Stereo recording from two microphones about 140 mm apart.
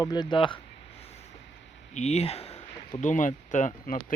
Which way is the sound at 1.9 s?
55° left (ahead or behind).